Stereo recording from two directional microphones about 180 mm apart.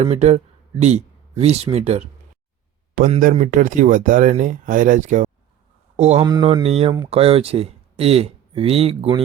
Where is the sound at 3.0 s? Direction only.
50° right (ahead or behind).